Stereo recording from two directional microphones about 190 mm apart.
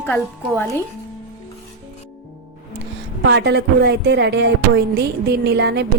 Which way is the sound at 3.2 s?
60° right (ahead or behind).